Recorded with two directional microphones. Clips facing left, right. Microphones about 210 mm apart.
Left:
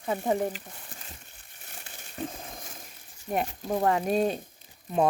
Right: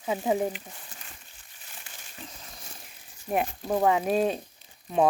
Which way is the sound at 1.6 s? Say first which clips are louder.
Left 2 dB; 55° left (ahead or behind).